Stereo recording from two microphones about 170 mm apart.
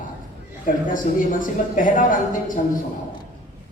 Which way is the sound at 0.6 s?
50° left (ahead or behind).